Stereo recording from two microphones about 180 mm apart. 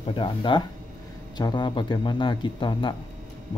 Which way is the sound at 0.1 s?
25° left (ahead or behind).